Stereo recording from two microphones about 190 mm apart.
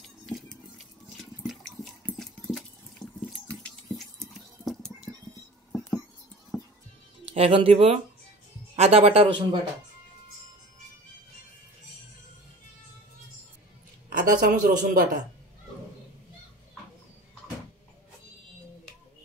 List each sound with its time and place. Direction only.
1.1 s a sound: centre (ahead or behind)
5.7 s music: 5° left (ahead or behind)
7.3 s speech: 30° right (ahead or behind)
14.1 s a man's voice: 45° right (ahead or behind)